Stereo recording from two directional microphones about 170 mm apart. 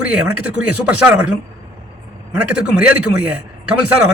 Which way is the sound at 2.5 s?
5° right (ahead or behind).